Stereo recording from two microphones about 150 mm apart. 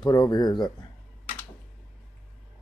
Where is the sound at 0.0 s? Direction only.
30° left (ahead or behind).